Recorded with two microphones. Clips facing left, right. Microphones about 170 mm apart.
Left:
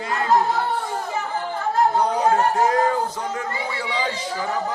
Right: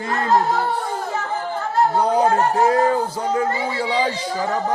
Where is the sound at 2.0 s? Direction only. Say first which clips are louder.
Right 2 dB; 30° right (ahead or behind).